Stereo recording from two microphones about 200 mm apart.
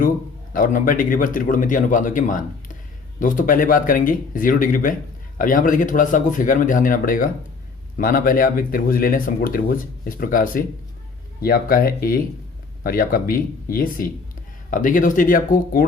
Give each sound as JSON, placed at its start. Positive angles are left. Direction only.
{"t": 0.5, "sound": "speech", "side_deg": 45}